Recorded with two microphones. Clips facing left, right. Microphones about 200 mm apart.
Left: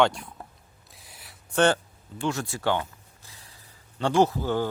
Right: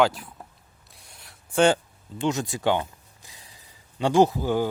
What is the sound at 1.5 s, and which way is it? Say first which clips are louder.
Zipper: right 2 dB; 15° right (ahead or behind).